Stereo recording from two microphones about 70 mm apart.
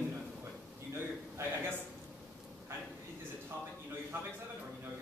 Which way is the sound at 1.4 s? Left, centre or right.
Right.